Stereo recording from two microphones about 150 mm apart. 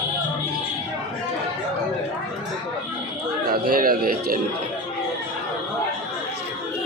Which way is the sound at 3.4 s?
75° right (ahead or behind).